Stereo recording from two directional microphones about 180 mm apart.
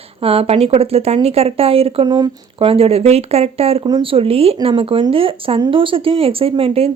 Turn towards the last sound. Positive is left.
turn(degrees=-30)  # may be behind; listen again after turning